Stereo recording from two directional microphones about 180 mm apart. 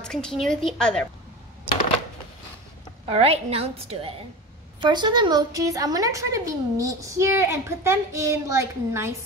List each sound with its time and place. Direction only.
0.0 s a woman's voice: 5° left (ahead or behind)
3.1 s a woman's voice: 35° right (ahead or behind); by 9.1 s 15° right (ahead or behind)